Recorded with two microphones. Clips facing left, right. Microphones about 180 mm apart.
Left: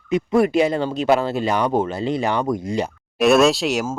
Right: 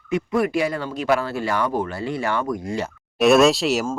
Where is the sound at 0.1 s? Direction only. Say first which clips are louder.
Left 4 dB; 25° left (ahead or behind).